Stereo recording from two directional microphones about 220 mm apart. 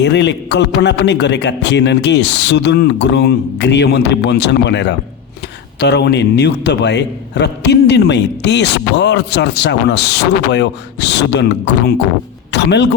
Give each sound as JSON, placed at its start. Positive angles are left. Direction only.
{"t": 0.0, "sound": "a man's voice", "side_deg": 50}